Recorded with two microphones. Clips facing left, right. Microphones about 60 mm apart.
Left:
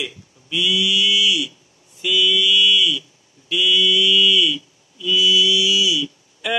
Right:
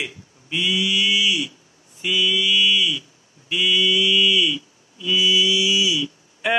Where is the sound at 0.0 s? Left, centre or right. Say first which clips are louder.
Left 1 dB; right.